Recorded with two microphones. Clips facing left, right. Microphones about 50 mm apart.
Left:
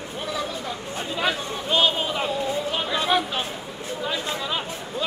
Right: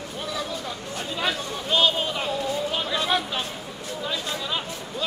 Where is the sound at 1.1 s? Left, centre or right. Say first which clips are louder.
Left 2 dB; centre.